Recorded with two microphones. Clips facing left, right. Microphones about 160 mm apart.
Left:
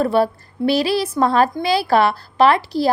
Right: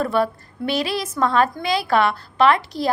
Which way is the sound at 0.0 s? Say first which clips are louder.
Left 4 dB; 35° left (ahead or behind).